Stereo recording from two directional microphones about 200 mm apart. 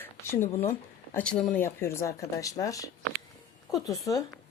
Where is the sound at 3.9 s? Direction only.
15° left (ahead or behind).